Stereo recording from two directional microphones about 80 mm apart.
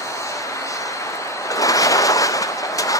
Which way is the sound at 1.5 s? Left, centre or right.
Left.